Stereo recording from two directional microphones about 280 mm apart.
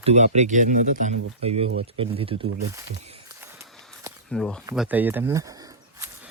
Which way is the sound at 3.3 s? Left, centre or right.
Centre.